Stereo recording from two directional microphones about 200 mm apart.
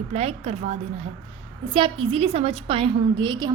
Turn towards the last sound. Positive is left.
turn(degrees=-25)  # may be behind; listen again after turning